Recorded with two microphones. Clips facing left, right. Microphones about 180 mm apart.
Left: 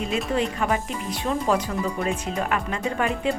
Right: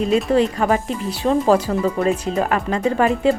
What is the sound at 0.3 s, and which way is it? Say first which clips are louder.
A woman's voice: right 7 dB; 35° right (ahead or behind).